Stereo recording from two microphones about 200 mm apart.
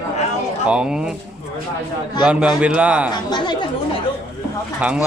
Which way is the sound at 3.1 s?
20° left (ahead or behind).